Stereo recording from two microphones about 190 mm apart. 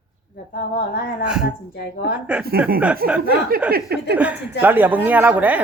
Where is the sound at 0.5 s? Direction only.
50° left (ahead or behind).